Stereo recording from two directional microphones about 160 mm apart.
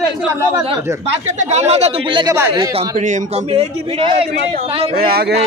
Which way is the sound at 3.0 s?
45° right (ahead or behind).